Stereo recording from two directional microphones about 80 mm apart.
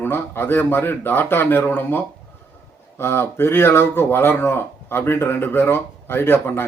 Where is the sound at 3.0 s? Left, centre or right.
Left.